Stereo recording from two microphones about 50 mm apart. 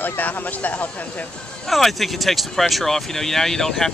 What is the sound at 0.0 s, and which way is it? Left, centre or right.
Speech, left.